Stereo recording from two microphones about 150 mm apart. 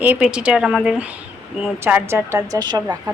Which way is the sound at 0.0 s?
10° right (ahead or behind).